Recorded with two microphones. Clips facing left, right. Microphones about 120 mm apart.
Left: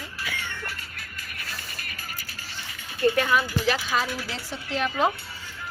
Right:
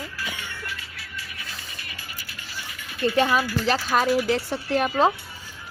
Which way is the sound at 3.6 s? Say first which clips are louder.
Right 2 dB; 40° right (ahead or behind).